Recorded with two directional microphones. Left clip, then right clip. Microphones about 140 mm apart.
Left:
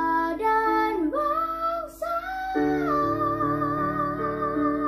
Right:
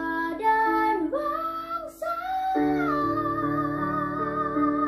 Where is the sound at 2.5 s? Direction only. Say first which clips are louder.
Left 5 dB; 25° left (ahead or behind).